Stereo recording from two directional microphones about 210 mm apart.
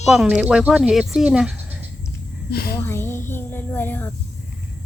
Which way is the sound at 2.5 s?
50° left (ahead or behind).